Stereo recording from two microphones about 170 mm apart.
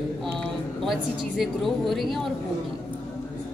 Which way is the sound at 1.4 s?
Centre (ahead or behind).